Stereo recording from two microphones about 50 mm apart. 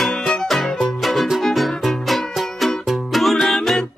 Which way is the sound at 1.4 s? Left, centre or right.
Centre.